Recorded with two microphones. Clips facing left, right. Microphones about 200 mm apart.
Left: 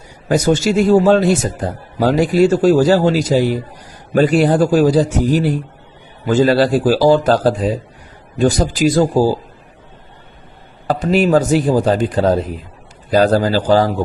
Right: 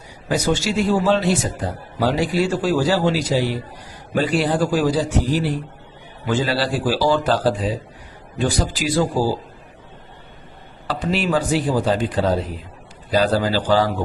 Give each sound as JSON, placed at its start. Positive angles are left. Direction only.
{"t": 0.3, "sound": "a man's voice", "side_deg": 45}
{"t": 10.8, "sound": "a man's voice", "side_deg": 45}